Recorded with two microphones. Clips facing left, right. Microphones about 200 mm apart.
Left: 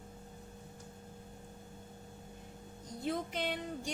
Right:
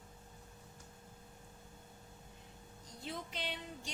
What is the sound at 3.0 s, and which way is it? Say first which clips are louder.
Speech: left 8 dB; 50° left (ahead or behind).